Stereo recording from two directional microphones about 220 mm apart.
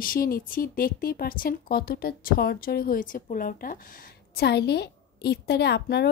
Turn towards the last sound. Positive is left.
turn(degrees=50)  # may be behind; listen again after turning